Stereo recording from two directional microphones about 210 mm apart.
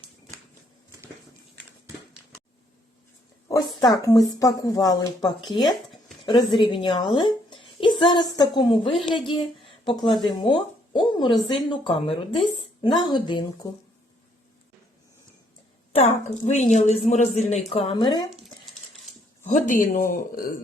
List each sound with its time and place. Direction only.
3.5 s a sound: 15° left (ahead or behind)
4.0 s speech: 15° left (ahead or behind)
6.6 s a woman's voice: 20° left (ahead or behind)
16.0 s a woman's voice: 35° left (ahead or behind); by 18.3 s 20° left (ahead or behind)
19.5 s a woman's voice: 35° left (ahead or behind)